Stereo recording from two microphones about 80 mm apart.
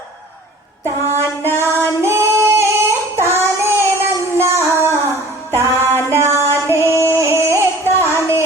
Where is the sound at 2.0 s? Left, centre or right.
Right.